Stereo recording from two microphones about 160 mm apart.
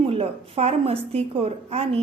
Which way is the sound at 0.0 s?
35° right (ahead or behind).